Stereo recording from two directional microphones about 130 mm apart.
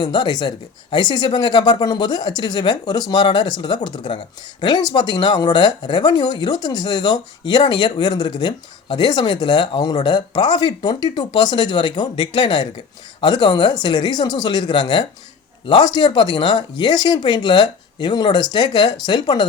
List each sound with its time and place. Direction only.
0.0 s speech: 35° left (ahead or behind)